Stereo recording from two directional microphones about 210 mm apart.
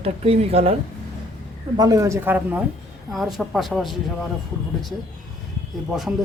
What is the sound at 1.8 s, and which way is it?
Speech, 15° right (ahead or behind).